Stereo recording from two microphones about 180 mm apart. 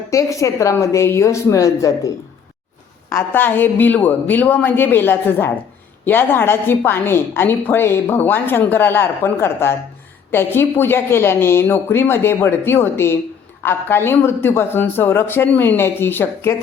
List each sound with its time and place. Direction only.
0.1 s a woman's voice: 15° left (ahead or behind)